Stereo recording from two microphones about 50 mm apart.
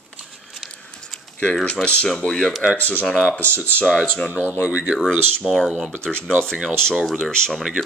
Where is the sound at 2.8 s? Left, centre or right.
Left.